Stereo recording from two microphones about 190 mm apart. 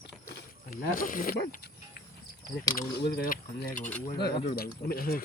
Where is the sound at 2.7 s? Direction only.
55° left (ahead or behind).